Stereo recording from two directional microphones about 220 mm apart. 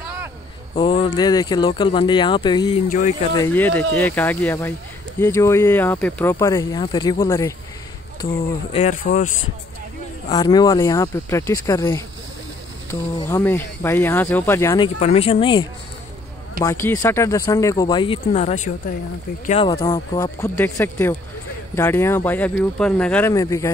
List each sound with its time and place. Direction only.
0.7 s speech: 20° left (ahead or behind)
2.9 s speech: 35° left (ahead or behind)
3.4 s speech: 10° left (ahead or behind)
9.0 s speech: 45° left (ahead or behind)
10.3 s speech: 20° left (ahead or behind)
13.2 s speech: 10° left (ahead or behind)
14.8 s speech: 30° left (ahead or behind)
16.6 s speech: 15° left (ahead or behind)